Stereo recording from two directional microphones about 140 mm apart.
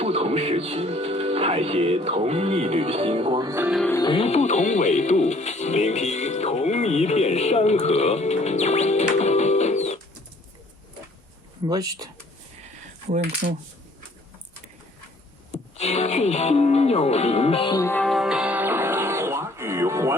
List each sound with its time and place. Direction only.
0.0 s speech: 45° right (ahead or behind)
4.0 s speech: 40° left (ahead or behind)
11.6 s speech: 25° right (ahead or behind)
13.1 s speech: 60° right (ahead or behind)
15.5 s speech: 50° left (ahead or behind)
17.7 s music: 15° left (ahead or behind)
18.0 s music: centre (ahead or behind); by 20.1 s 20° right (ahead or behind)